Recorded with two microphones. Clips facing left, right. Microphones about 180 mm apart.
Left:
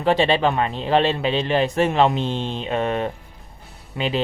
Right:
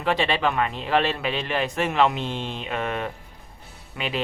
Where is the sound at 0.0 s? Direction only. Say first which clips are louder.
Left 5 dB; 30° left (ahead or behind).